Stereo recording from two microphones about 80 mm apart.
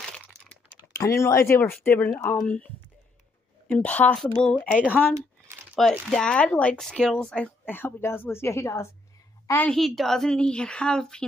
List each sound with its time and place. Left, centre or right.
0.9 s a woman's voice: left
3.7 s speech: centre
5.8 s speech: centre
7.6 s a woman's voice: left
9.7 s speech: centre